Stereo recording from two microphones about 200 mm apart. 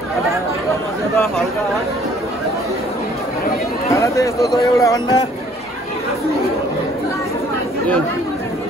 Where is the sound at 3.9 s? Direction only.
15° left (ahead or behind).